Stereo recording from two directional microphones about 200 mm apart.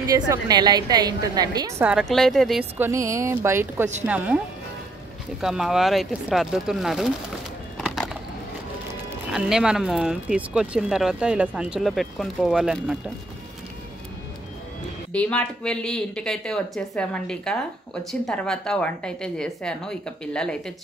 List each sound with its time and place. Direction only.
0.0 s a woman's voice: 15° right (ahead or behind)
1.8 s speech: 5° right (ahead or behind)
2.8 s speech: 15° right (ahead or behind)
5.4 s speech: 5° right (ahead or behind)
7.7 s a sound: centre (ahead or behind)
9.3 s speech: 5° right (ahead or behind)
15.1 s speech: 5° left (ahead or behind)